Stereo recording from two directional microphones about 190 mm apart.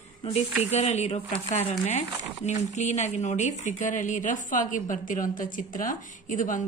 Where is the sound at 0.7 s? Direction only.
35° left (ahead or behind).